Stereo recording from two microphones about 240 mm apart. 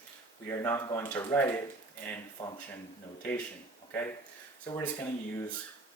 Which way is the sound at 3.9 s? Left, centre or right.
Centre.